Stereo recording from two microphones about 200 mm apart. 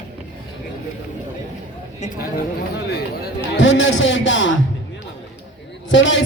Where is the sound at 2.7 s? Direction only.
55° left (ahead or behind).